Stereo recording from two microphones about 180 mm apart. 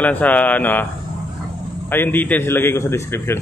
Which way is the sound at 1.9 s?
10° left (ahead or behind).